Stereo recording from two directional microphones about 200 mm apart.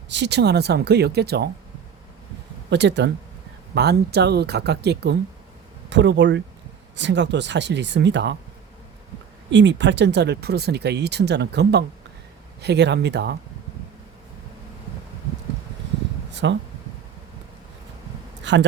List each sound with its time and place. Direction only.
0.1 s speech: 60° right (ahead or behind)
2.6 s speech: 60° right (ahead or behind)
9.5 s speech: 65° right (ahead or behind)
16.3 s a sound: 60° right (ahead or behind)
18.5 s a man's voice: 65° right (ahead or behind)